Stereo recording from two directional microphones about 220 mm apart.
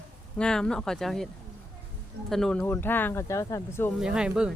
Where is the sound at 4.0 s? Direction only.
5° right (ahead or behind).